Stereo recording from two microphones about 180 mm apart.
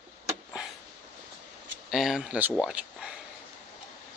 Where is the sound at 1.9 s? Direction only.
Centre (ahead or behind).